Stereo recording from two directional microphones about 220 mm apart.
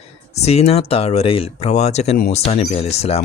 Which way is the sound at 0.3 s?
30° left (ahead or behind).